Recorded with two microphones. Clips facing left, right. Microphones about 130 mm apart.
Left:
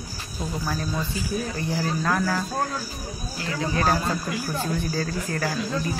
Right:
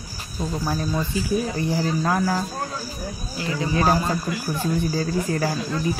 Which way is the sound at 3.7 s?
15° right (ahead or behind).